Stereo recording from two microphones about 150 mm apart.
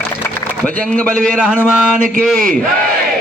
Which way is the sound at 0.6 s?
10° left (ahead or behind).